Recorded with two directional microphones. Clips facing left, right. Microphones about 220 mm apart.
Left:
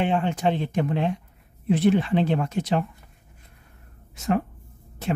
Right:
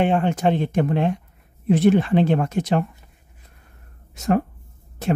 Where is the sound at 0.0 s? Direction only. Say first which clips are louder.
Right 4 dB; 50° right (ahead or behind).